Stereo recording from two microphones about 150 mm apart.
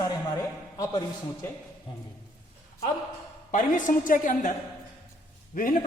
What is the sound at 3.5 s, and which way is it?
Speech, 60° left (ahead or behind).